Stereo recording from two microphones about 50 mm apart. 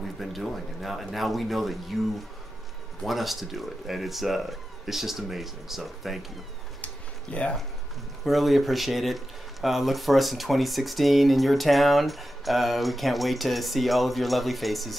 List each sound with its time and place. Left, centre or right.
0.0 s speech: centre
3.0 s speech: centre
6.8 s a sound: left
8.2 s speech: centre